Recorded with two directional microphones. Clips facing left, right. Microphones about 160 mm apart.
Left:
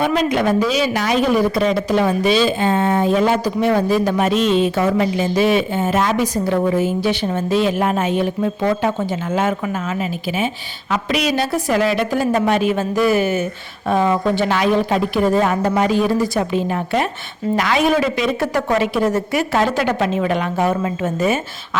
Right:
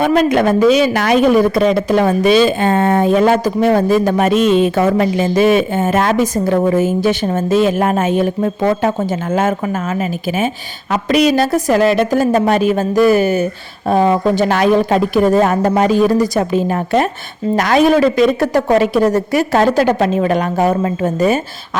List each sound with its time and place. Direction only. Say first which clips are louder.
0.0 s a woman's voice: right 5 dB; 50° right (ahead or behind)